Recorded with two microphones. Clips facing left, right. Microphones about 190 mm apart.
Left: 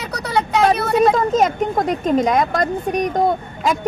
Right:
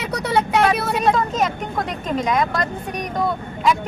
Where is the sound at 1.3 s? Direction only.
45° left (ahead or behind).